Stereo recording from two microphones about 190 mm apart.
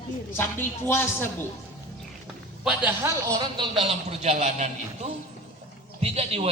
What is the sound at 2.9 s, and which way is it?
Speech, 15° right (ahead or behind).